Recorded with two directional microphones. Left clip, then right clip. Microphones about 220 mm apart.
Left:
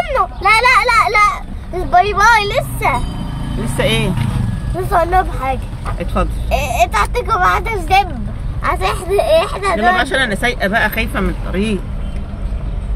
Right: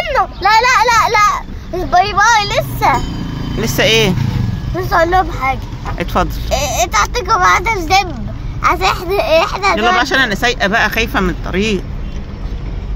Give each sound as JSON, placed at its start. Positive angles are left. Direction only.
{"t": 0.0, "sound": "children playing", "side_deg": -15}
{"t": 3.7, "sound": "speech", "side_deg": -40}
{"t": 4.9, "sound": "speech", "side_deg": -15}
{"t": 8.6, "sound": "speech", "side_deg": -30}